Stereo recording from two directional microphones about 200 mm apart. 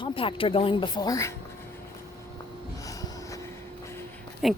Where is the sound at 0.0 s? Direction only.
25° left (ahead or behind).